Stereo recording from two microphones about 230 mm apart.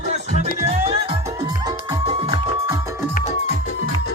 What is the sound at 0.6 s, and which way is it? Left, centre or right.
Music, right.